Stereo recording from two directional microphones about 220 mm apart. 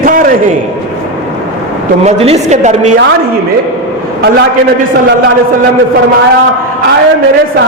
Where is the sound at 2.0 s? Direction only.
30° right (ahead or behind).